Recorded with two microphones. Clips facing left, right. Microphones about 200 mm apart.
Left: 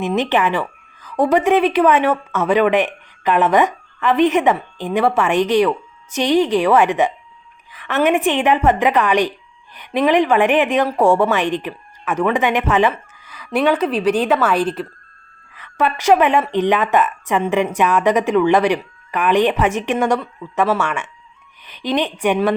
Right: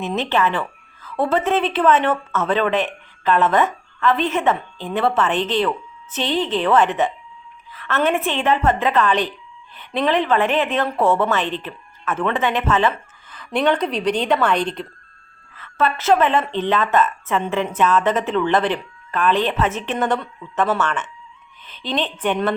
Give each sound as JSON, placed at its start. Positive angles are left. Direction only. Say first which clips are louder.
{"t": 0.0, "sound": "speech", "louder": "left 3 dB", "side_deg": 15}